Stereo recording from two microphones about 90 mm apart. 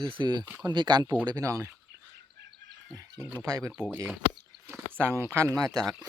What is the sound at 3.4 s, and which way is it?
Speech, 40° right (ahead or behind).